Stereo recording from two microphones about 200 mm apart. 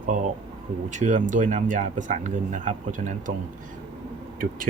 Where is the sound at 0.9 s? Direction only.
40° right (ahead or behind).